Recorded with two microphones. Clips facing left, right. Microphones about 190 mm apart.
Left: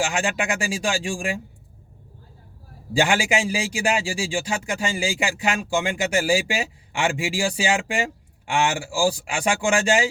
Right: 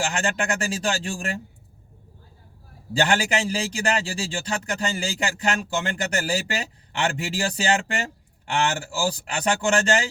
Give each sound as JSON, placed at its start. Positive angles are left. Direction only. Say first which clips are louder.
{"t": 0.2, "sound": "a man's voice", "louder": "left 1 dB", "side_deg": 10}
{"t": 2.9, "sound": "a man's voice", "louder": "left 1 dB", "side_deg": 10}